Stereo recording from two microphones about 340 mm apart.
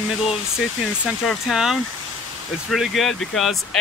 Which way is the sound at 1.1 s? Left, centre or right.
Centre.